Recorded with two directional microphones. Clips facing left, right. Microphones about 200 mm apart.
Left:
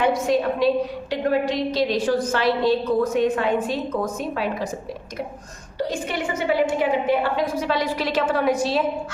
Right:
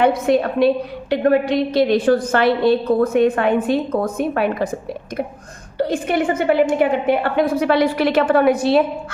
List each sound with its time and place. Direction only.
0.0 s a woman's voice: 55° right (ahead or behind)